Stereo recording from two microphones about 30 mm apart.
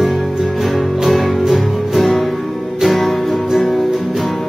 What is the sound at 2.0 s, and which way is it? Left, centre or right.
Music, centre.